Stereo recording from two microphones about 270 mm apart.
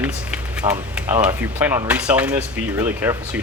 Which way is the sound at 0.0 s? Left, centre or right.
Centre.